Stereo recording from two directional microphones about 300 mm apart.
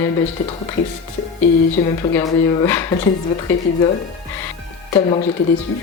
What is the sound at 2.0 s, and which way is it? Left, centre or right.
Speech, centre.